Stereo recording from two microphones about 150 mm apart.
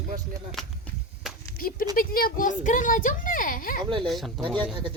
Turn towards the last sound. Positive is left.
turn(degrees=-30)  # may be behind; listen again after turning